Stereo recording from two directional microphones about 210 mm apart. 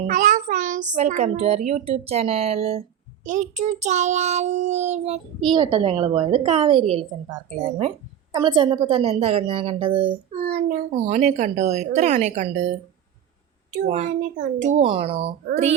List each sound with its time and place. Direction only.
0.1 s a child's voice: 40° right (ahead or behind)
10.5 s a child's voice: 40° right (ahead or behind)
13.7 s a child's voice: 40° right (ahead or behind)